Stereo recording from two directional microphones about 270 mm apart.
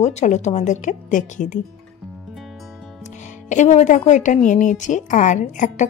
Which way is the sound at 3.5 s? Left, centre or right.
Left.